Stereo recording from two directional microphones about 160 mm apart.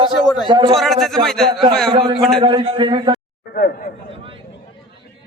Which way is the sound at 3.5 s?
70° left (ahead or behind).